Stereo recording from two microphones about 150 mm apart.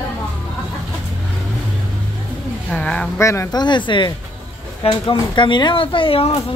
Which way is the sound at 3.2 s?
20° left (ahead or behind).